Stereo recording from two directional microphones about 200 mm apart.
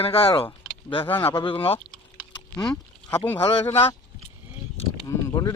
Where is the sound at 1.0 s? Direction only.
10° left (ahead or behind).